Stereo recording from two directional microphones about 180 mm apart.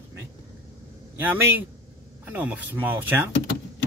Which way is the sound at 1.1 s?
10° right (ahead or behind).